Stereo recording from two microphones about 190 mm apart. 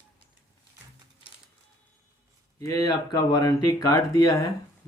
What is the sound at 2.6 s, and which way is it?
Speech, 20° left (ahead or behind).